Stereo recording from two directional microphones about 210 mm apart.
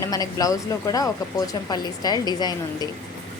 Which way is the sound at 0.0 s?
15° left (ahead or behind).